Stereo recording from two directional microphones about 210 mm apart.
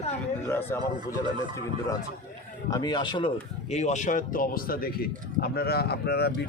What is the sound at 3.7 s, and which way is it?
Speech, 35° left (ahead or behind).